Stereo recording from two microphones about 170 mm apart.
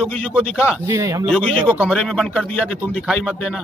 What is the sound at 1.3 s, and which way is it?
A man's voice, 5° left (ahead or behind).